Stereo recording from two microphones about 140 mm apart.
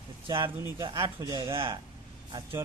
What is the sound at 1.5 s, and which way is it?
Speech, 40° right (ahead or behind).